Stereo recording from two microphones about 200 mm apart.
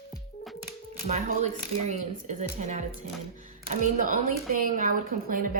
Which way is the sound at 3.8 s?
40° right (ahead or behind).